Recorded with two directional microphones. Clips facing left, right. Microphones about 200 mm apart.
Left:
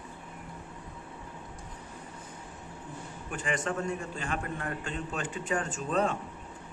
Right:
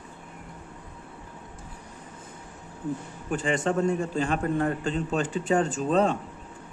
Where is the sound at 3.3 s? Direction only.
30° right (ahead or behind).